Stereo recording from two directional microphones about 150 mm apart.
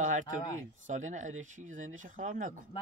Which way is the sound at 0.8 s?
55° right (ahead or behind).